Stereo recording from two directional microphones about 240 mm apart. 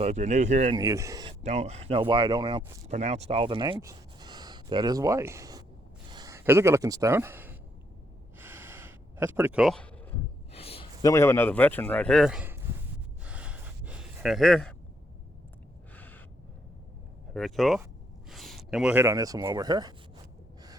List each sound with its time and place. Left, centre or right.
0.0 s speech: right
0.8 s speech: centre
8.4 s a sound: centre
10.5 s a sound: left
11.1 s a man's voice: centre
13.2 s gasp: centre
16.0 s gasp: centre
17.3 s speech: centre